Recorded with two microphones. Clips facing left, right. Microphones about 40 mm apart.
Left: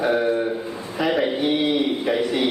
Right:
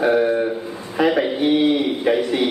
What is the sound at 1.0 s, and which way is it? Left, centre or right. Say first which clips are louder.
Speech: right 5 dB; right.